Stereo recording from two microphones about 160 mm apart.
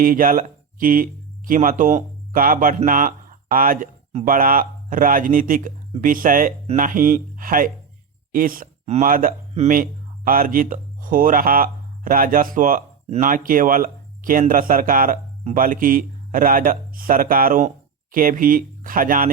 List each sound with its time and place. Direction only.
0.0 s speech: 60° right (ahead or behind)